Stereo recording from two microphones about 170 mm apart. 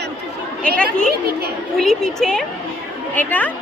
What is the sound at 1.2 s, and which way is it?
Speech, 65° right (ahead or behind).